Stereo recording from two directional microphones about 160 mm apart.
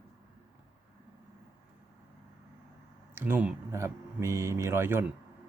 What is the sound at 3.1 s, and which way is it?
Speech, 15° right (ahead or behind).